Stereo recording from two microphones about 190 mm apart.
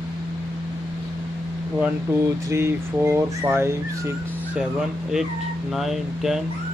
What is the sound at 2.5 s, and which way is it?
Speech, 15° right (ahead or behind).